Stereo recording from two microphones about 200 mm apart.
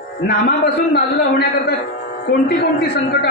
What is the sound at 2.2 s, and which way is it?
Speech, 55° left (ahead or behind).